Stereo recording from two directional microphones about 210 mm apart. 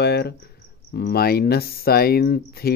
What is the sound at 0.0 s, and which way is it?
Cricket, 50° left (ahead or behind).